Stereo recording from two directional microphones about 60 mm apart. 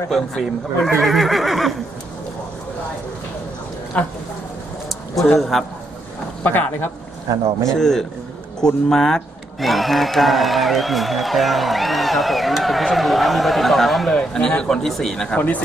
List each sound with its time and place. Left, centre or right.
0.3 s speech: centre
3.9 s speech: left
5.4 s speech: centre
6.4 s speech: left
7.6 s speech: centre